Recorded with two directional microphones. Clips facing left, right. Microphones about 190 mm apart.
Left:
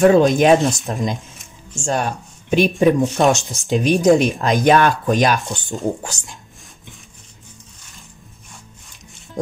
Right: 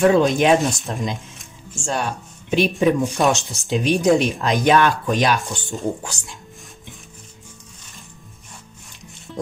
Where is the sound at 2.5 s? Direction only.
45° left (ahead or behind).